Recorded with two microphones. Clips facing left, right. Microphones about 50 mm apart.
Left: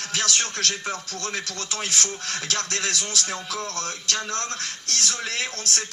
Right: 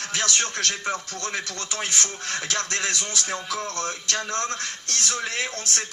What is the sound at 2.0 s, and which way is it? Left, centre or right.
Speech, right.